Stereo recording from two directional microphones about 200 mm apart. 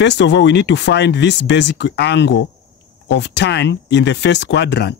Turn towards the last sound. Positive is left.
turn(degrees=55)  # may be behind; listen again after turning